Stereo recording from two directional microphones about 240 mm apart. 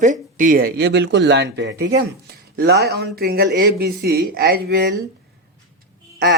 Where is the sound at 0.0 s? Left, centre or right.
Right.